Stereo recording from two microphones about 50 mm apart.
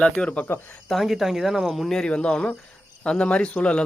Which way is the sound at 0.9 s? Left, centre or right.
Centre.